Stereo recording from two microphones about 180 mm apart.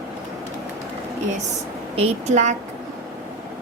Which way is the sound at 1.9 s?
35° right (ahead or behind).